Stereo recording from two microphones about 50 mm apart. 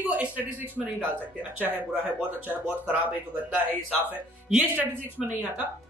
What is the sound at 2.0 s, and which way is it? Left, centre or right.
Speech, right.